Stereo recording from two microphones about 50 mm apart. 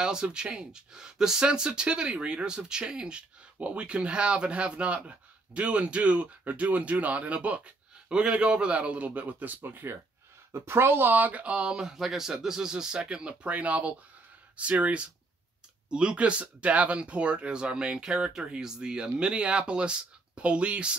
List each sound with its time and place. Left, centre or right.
0.0 s speech: centre; by 9.9 s right
10.5 s speech: right
15.9 s speech: centre